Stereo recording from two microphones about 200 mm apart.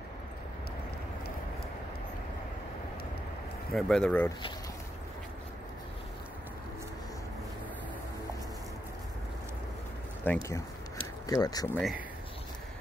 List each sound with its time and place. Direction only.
3.7 s speech: 5° left (ahead or behind)
10.2 s speech: 10° left (ahead or behind)
11.0 s a sound: 20° left (ahead or behind)
11.7 s speech: centre (ahead or behind)